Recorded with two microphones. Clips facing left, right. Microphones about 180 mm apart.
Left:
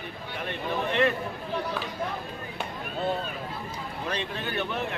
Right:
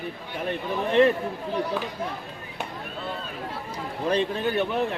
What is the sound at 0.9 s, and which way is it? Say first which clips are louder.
Speech: right 7 dB; 35° right (ahead or behind).